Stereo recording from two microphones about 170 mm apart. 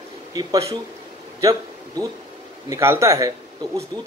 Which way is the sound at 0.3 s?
20° right (ahead or behind).